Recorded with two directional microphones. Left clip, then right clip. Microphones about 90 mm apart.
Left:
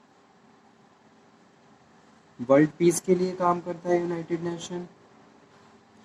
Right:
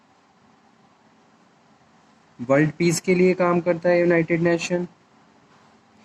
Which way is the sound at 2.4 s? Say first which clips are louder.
Even; 30° right (ahead or behind).